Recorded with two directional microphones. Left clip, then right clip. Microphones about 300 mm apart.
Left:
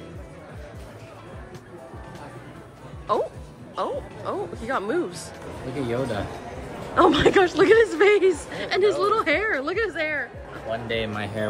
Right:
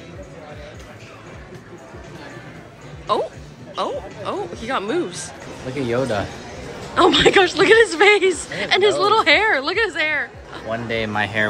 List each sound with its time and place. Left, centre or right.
3.1 s speech: centre
5.8 s speech: right
7.0 s speech: centre
10.7 s speech: right